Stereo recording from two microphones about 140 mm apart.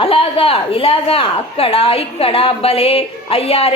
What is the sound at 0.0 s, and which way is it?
Speech, 40° left (ahead or behind).